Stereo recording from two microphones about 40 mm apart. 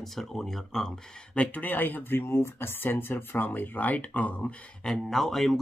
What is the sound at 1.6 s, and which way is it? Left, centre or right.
Speech, left.